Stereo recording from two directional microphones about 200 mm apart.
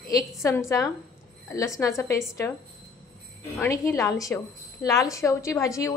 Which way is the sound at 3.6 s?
15° left (ahead or behind).